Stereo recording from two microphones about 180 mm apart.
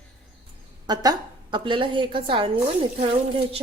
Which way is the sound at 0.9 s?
25° right (ahead or behind).